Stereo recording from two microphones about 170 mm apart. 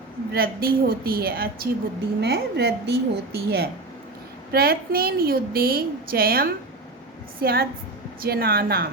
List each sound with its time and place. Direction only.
0.3 s a woman's voice: 60° right (ahead or behind)
2.2 s a woman's voice: 70° right (ahead or behind)